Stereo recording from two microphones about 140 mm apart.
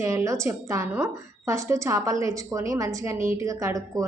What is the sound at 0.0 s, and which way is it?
A woman's voice, 20° right (ahead or behind).